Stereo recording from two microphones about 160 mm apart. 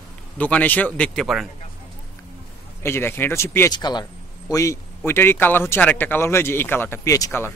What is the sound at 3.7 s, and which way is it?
A man's voice, 25° left (ahead or behind).